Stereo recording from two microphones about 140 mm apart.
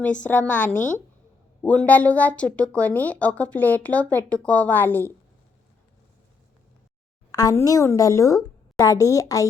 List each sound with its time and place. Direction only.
0.0 s a woman's voice: 10° left (ahead or behind)
7.3 s a woman's voice: 25° left (ahead or behind)